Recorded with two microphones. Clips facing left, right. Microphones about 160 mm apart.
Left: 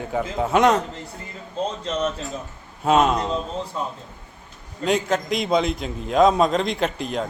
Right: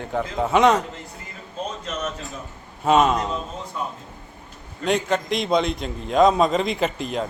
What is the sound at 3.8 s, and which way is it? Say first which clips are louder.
Speech: right 1 dB; 30° left (ahead or behind).